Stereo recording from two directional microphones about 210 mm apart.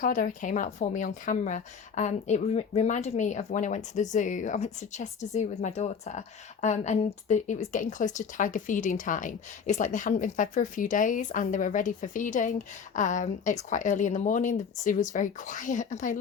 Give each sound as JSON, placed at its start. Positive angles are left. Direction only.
{"t": 0.0, "sound": "a woman's voice", "side_deg": 40}